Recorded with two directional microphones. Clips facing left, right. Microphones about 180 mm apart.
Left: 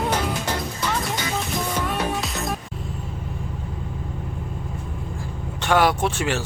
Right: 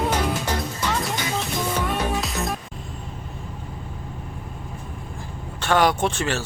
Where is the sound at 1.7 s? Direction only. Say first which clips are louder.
Right 1 dB; centre (ahead or behind).